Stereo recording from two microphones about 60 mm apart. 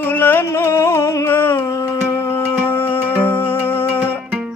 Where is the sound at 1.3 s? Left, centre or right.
Left.